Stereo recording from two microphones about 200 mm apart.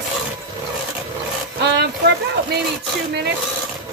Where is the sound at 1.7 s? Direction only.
55° right (ahead or behind).